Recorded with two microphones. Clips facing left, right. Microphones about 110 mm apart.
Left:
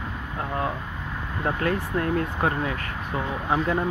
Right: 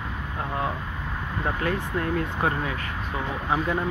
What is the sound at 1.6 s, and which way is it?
Speech, 40° left (ahead or behind).